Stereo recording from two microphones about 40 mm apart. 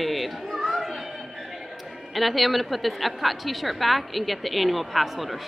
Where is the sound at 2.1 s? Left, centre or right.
Centre.